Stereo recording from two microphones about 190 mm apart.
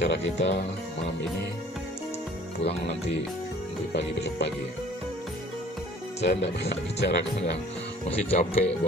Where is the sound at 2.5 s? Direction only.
35° left (ahead or behind).